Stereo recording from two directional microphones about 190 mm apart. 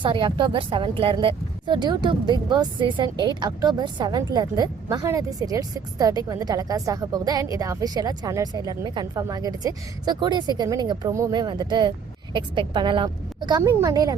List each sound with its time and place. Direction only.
0.0 s speech: 25° right (ahead or behind)